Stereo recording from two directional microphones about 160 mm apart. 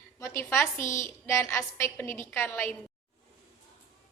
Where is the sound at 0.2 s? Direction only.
15° left (ahead or behind).